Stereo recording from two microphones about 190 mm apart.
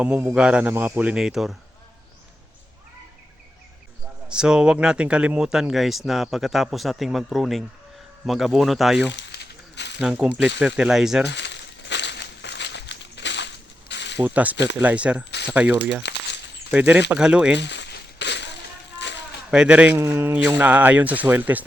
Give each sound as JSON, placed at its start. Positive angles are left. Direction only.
{"t": 0.0, "sound": "speech", "side_deg": -10}
{"t": 4.3, "sound": "speech", "side_deg": -5}
{"t": 9.0, "sound": "a sound", "side_deg": 65}
{"t": 10.0, "sound": "speech", "side_deg": -5}
{"t": 11.3, "sound": "crumpling", "side_deg": 65}
{"t": 14.2, "sound": "speech", "side_deg": -10}
{"t": 14.5, "sound": "speech", "side_deg": 65}
{"t": 14.8, "sound": "speech", "side_deg": -5}
{"t": 15.3, "sound": "speech", "side_deg": 65}
{"t": 16.7, "sound": "speech", "side_deg": -10}
{"t": 17.6, "sound": "crushing", "side_deg": 65}
{"t": 18.9, "sound": "a sound", "side_deg": 70}
{"t": 19.5, "sound": "speech", "side_deg": -5}